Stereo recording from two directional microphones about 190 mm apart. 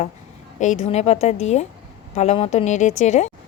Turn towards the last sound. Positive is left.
turn(degrees=40)  # may be behind; listen again after turning